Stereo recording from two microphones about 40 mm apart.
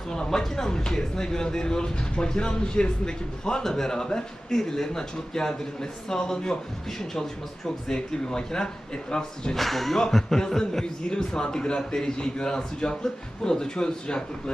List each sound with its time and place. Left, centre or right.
0.1 s a man's voice: centre
7.9 s speech: centre
9.6 s music: centre
10.1 s a man's voice: centre